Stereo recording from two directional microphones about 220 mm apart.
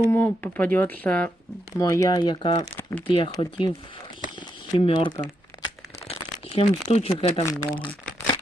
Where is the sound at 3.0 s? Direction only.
25° left (ahead or behind).